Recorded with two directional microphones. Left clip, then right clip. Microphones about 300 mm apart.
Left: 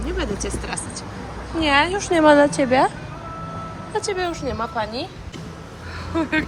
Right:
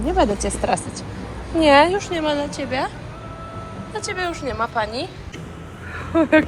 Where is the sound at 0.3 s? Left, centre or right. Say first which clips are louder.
Right 7 dB; centre.